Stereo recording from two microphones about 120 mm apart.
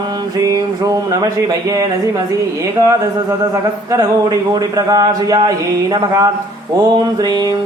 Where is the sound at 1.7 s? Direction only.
30° right (ahead or behind).